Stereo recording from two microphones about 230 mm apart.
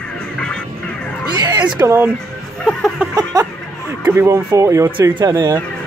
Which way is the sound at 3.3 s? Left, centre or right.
Centre.